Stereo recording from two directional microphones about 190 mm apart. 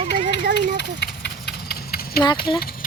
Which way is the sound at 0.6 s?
60° left (ahead or behind).